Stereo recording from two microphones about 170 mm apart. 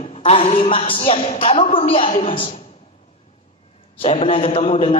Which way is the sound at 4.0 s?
35° left (ahead or behind).